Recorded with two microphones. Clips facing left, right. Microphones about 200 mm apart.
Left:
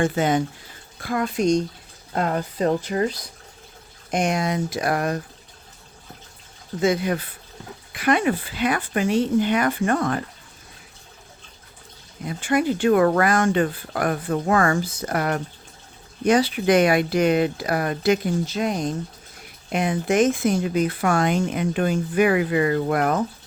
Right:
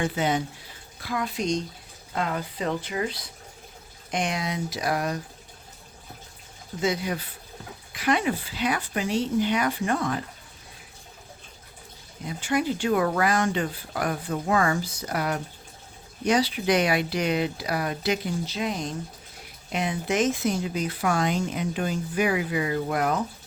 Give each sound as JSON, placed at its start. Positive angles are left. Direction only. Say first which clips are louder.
{"t": 0.0, "sound": "speech", "louder": "left 5 dB", "side_deg": 50}
{"t": 6.8, "sound": "speech", "louder": "left 5 dB", "side_deg": 55}
{"t": 12.4, "sound": "speech", "louder": "left 5 dB", "side_deg": 55}